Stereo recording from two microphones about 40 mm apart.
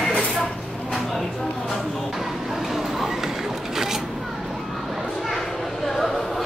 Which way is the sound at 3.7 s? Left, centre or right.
Centre.